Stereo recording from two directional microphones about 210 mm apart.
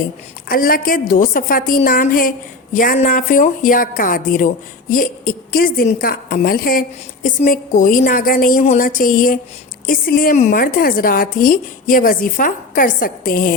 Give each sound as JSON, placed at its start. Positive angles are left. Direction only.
{"t": 0.4, "sound": "a woman's voice", "side_deg": 45}